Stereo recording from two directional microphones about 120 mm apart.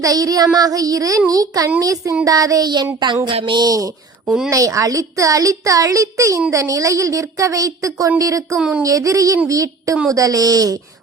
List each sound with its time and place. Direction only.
0.0 s child singing: 30° right (ahead or behind)
1.8 s a woman's voice: 30° right (ahead or behind)
2.2 s child singing: 30° right (ahead or behind)
4.4 s a woman's voice: 30° right (ahead or behind)
8.5 s speech: 5° right (ahead or behind)
8.8 s a woman's voice: 25° right (ahead or behind)
10.1 s child singing: 30° right (ahead or behind)